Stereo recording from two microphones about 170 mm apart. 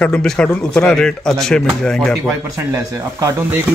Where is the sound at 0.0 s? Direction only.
5° left (ahead or behind).